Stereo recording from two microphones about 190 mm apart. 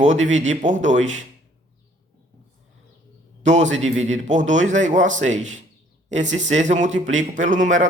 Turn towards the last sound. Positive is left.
turn(degrees=-40)  # may be behind; listen again after turning